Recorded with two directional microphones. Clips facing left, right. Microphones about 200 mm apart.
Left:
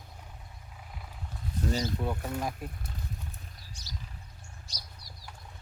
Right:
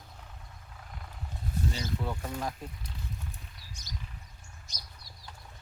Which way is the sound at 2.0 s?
10° left (ahead or behind).